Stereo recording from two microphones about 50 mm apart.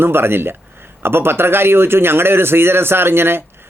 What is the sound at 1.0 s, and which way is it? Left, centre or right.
A man's voice, right.